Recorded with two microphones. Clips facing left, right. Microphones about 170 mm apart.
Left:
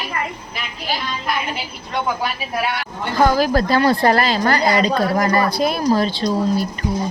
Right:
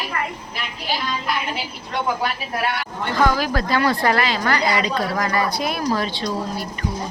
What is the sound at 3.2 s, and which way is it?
A woman's voice, 40° left (ahead or behind).